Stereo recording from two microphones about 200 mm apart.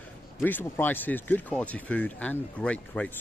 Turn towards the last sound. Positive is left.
turn(degrees=5)  # may be behind; listen again after turning